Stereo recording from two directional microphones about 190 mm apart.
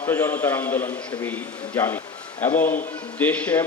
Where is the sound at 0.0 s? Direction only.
10° left (ahead or behind).